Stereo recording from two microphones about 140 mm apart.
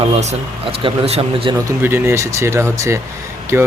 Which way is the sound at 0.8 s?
40° right (ahead or behind).